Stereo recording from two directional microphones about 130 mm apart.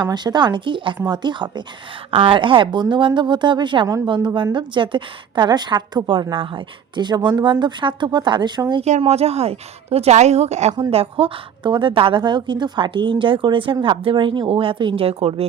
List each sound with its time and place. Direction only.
0.0 s a woman's voice: 35° right (ahead or behind)
8.8 s a woman's voice: 55° right (ahead or behind)
10.9 s a woman's voice: 45° right (ahead or behind)